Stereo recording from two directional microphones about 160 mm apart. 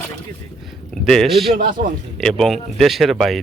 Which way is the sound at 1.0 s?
Centre (ahead or behind).